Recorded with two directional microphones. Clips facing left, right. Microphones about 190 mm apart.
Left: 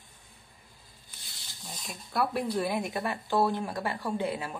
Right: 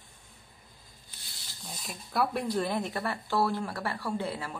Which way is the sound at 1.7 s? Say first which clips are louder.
Even; centre (ahead or behind).